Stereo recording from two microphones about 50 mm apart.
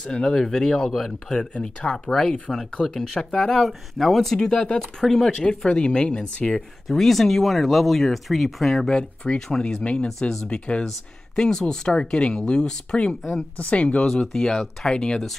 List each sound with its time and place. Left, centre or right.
0.0 s speech: centre
3.3 s speech: left
3.5 s speech: centre
4.4 s speech: centre
6.9 s speech: centre
8.9 s speech: centre
14.0 s speech: centre